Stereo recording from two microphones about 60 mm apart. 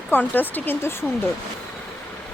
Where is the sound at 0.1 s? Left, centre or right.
Left.